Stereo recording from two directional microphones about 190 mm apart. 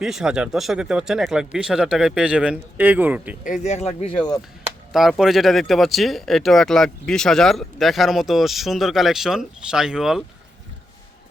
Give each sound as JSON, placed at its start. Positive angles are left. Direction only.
{"t": 0.0, "sound": "speech", "side_deg": -5}
{"t": 3.4, "sound": "speech", "side_deg": 40}
{"t": 4.1, "sound": "speech", "side_deg": 5}